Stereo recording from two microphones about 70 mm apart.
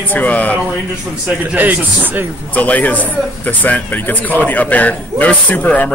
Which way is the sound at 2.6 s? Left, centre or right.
Left.